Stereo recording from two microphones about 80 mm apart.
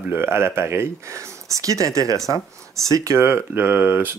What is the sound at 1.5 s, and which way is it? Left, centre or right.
Speech, right.